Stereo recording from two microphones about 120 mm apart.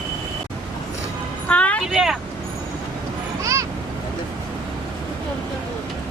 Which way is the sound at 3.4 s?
25° right (ahead or behind).